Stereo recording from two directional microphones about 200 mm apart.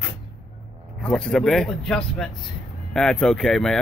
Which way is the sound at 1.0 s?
5° left (ahead or behind).